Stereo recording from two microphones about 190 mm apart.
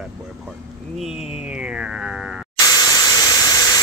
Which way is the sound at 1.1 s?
30° left (ahead or behind).